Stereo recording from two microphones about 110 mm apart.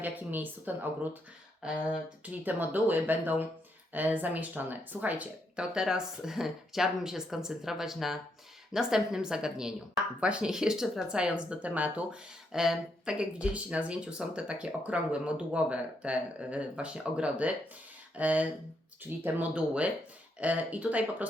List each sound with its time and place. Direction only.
0.0 s speech: 15° right (ahead or behind)